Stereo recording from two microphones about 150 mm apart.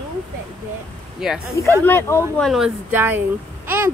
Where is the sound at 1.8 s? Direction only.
15° left (ahead or behind).